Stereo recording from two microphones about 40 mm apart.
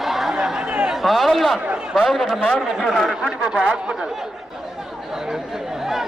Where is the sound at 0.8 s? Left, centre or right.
Centre.